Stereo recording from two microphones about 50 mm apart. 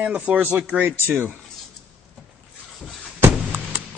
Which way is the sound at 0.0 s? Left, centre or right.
Right.